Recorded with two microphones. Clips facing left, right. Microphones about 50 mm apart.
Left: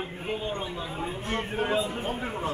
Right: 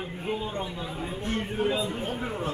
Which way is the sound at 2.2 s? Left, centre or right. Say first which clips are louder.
Even; centre.